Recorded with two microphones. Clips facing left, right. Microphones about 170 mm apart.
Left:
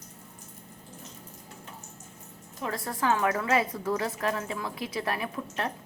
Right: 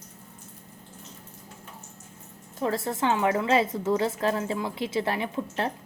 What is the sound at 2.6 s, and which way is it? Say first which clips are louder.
A woman's voice: right 3 dB; 25° right (ahead or behind).